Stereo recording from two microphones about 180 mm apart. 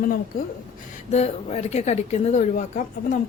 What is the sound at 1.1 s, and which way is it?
Speech, 35° left (ahead or behind).